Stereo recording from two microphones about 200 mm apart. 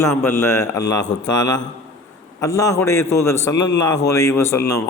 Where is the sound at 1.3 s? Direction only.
20° left (ahead or behind).